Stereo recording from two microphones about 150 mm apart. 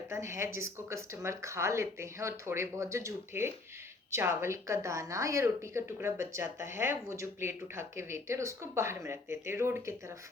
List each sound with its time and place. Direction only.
0.1 s a woman's voice: 20° right (ahead or behind)